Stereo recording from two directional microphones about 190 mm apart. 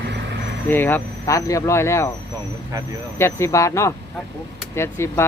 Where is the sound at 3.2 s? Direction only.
15° left (ahead or behind).